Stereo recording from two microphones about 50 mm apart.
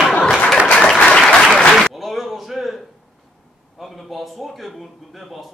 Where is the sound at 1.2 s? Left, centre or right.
Centre.